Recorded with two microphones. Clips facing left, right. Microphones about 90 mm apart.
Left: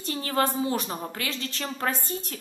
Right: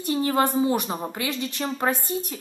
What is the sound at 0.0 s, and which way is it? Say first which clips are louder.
A woman's voice: right 4 dB; 20° right (ahead or behind).